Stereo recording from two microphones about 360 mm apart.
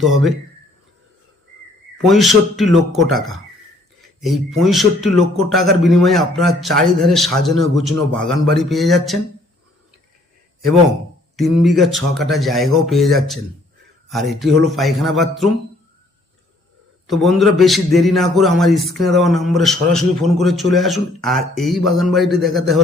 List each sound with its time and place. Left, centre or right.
2.0 s a man's voice: centre
11.3 s a man's voice: centre
17.1 s a man's voice: centre